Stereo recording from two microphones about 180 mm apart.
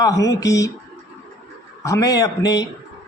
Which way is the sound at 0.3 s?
20° left (ahead or behind).